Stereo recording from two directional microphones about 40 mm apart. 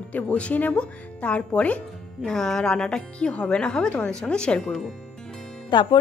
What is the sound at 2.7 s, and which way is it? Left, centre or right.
Speech, left.